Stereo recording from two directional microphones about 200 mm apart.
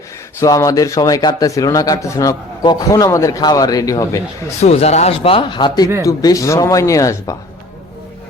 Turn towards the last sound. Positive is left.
turn(degrees=15)  # may be behind; listen again after turning